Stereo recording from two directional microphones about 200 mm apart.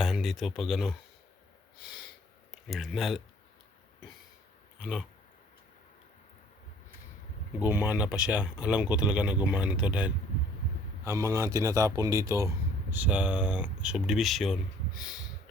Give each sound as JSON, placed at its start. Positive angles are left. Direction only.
{"t": 0.0, "sound": "speech", "side_deg": 0}
{"t": 2.5, "sound": "speech", "side_deg": 0}
{"t": 7.6, "sound": "speech", "side_deg": -10}